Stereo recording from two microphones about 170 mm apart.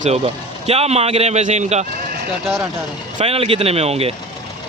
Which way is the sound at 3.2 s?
35° right (ahead or behind).